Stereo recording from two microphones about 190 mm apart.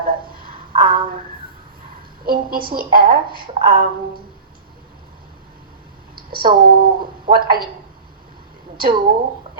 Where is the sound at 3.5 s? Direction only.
30° right (ahead or behind).